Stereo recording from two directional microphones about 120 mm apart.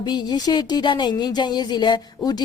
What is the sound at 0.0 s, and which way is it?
Speech, 35° left (ahead or behind).